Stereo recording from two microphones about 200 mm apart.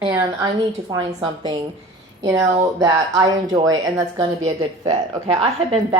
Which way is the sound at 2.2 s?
15° right (ahead or behind).